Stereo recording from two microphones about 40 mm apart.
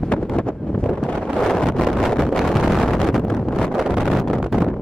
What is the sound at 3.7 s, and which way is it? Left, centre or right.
Vehicle, centre.